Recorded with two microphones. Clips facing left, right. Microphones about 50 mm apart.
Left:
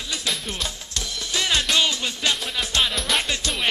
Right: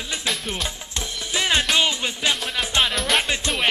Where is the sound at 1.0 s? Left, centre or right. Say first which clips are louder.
Right 1 dB; right.